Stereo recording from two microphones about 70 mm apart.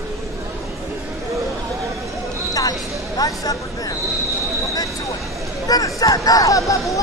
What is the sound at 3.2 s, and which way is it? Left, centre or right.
Speech, left.